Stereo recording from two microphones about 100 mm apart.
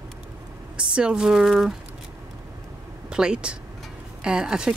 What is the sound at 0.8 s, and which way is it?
Speech, 10° right (ahead or behind).